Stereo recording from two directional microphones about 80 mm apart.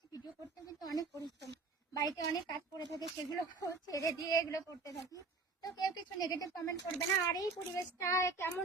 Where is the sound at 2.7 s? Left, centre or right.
Left.